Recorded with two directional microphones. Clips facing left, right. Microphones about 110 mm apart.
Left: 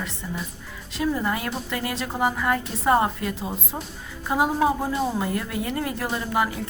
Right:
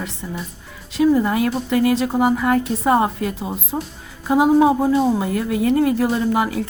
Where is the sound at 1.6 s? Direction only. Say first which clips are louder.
Right 11 dB; 20° right (ahead or behind).